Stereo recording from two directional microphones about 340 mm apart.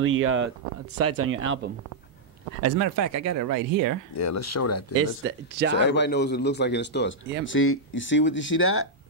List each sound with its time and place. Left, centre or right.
0.0 s speech: right
2.6 s speech: right
4.1 s speech: left
4.9 s speech: right
5.7 s speech: left